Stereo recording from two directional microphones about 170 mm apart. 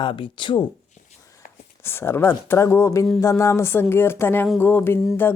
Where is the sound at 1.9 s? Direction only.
15° left (ahead or behind).